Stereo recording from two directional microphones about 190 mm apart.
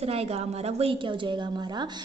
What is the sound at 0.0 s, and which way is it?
A woman's voice, 30° right (ahead or behind).